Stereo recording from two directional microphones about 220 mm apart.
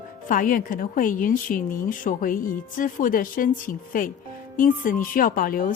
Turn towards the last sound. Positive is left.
turn(degrees=40)  # may be behind; listen again after turning